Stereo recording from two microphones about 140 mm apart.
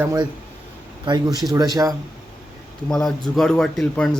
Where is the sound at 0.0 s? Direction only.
20° right (ahead or behind).